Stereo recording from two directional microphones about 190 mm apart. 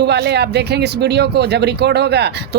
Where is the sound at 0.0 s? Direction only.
60° right (ahead or behind).